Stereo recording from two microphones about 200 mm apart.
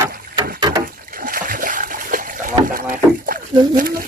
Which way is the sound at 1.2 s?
45° right (ahead or behind).